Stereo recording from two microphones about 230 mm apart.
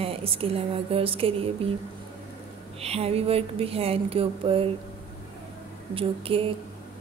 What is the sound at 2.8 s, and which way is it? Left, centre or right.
A woman's voice, right.